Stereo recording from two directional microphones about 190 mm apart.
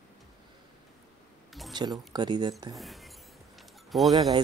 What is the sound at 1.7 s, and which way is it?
Speech, 20° right (ahead or behind).